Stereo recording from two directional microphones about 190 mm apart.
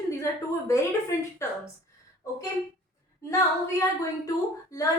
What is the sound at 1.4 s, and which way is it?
Speech, 15° left (ahead or behind).